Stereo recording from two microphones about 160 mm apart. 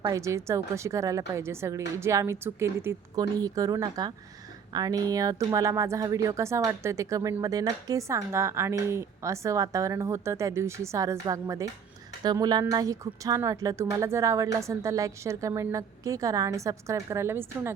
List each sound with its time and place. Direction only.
0.0 s a woman's voice: 20° right (ahead or behind)